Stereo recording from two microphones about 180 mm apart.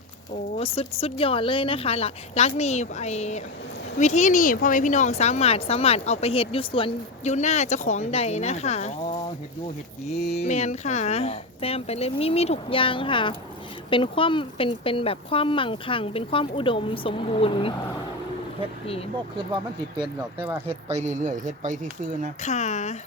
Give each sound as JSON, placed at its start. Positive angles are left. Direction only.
{"t": 0.5, "sound": "speech", "side_deg": 35}
{"t": 10.3, "sound": "speech", "side_deg": 35}
{"t": 20.4, "sound": "speech", "side_deg": -10}
{"t": 20.8, "sound": "speech", "side_deg": -40}
{"t": 22.4, "sound": "speech", "side_deg": 40}